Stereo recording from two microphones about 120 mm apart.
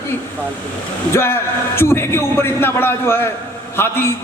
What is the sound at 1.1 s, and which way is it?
A man's voice, 20° left (ahead or behind).